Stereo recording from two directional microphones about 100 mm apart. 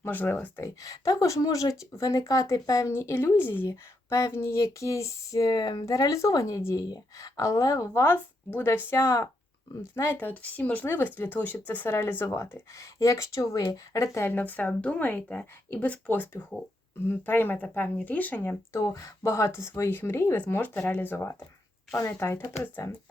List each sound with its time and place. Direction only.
0.0 s speech: 20° left (ahead or behind)
0.6 s speech: 35° left (ahead or behind)